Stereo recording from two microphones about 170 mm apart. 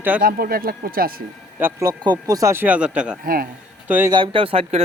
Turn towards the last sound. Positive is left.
turn(degrees=-35)  # may be behind; listen again after turning